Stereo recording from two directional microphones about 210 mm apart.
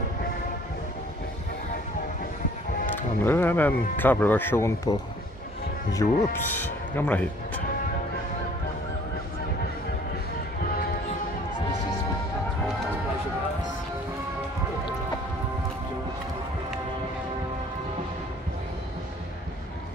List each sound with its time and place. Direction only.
3.0 s speech: 10° left (ahead or behind)